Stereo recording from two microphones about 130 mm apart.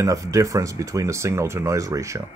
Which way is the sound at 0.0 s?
25° right (ahead or behind).